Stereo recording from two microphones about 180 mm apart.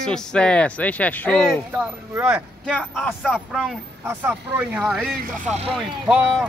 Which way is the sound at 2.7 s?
5° left (ahead or behind).